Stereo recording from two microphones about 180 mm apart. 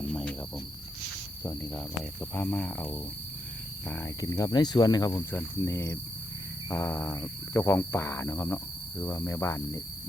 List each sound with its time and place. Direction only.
0.1 s cricket: 5° left (ahead or behind)
2.3 s speech: 10° left (ahead or behind)